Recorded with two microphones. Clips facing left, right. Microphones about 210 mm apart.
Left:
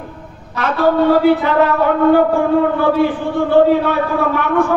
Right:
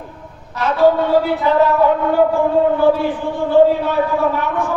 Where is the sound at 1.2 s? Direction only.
70° left (ahead or behind).